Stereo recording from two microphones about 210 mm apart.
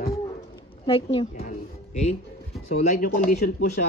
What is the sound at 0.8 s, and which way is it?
Speech, 25° left (ahead or behind).